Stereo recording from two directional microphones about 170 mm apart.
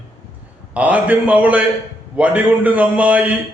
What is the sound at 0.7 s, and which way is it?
Speech, 10° right (ahead or behind).